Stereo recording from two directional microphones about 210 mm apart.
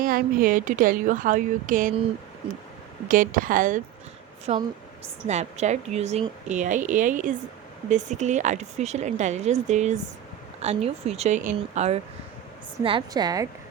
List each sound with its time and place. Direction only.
0.0 s speech: 40° right (ahead or behind)
3.1 s a woman's voice: 40° right (ahead or behind); by 13.5 s 20° right (ahead or behind)